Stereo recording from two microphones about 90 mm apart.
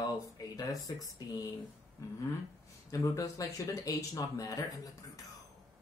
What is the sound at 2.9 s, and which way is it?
Speech, 35° left (ahead or behind).